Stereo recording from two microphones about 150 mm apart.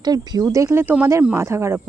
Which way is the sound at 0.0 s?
25° right (ahead or behind).